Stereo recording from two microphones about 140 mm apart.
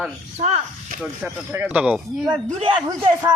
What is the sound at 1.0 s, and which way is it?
Speech, 5° right (ahead or behind).